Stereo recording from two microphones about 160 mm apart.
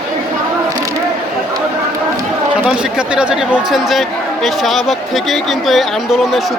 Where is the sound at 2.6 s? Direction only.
5° right (ahead or behind).